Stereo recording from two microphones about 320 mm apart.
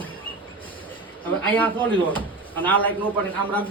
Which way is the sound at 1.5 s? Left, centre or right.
Centre.